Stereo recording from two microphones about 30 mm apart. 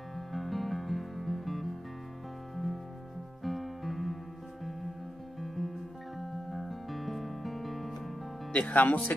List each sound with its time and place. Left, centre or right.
0.1 s music: centre
5.6 s music: centre
8.7 s speech: left